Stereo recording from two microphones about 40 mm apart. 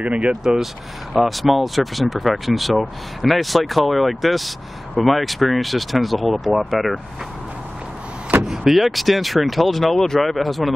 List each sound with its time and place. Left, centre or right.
0.2 s speech: centre
1.1 s speech: centre
8.3 s vehicle: right
8.7 s speech: centre